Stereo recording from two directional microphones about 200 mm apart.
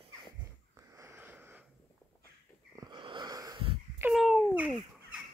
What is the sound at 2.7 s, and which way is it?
Wheeze, 20° right (ahead or behind).